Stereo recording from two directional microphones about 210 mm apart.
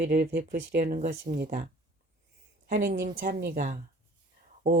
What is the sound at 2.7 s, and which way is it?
Speech, 45° right (ahead or behind).